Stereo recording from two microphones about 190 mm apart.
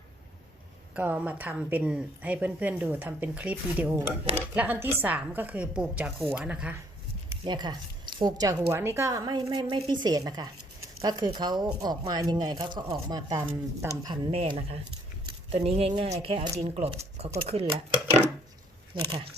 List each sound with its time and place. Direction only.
0.9 s a woman's voice: 10° right (ahead or behind)
7.4 s speech: 20° right (ahead or behind)
14.3 s speech: 30° right (ahead or behind)